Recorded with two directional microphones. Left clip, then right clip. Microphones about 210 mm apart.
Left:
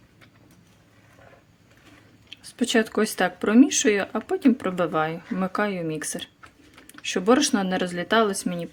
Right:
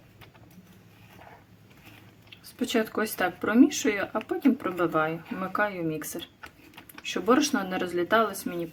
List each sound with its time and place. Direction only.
2.3 s speech: 35° left (ahead or behind)